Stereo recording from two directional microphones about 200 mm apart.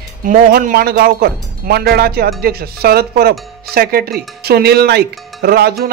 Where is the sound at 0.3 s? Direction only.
45° right (ahead or behind).